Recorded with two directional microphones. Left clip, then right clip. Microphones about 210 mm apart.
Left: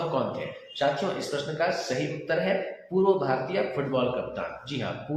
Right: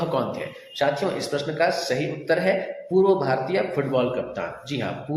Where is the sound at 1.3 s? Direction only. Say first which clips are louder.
Right 6 dB; 30° right (ahead or behind).